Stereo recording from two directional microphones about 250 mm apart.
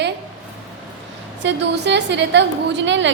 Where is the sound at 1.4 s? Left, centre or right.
Right.